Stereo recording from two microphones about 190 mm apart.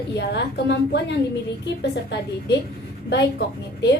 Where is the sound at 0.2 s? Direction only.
60° left (ahead or behind).